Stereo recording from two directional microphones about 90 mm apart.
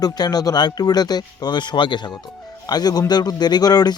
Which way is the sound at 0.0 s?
45° left (ahead or behind).